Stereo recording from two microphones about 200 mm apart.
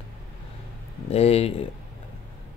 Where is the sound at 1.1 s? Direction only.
30° left (ahead or behind).